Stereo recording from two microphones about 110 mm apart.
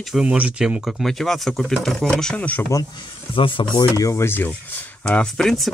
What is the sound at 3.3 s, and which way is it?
Speech, 50° left (ahead or behind).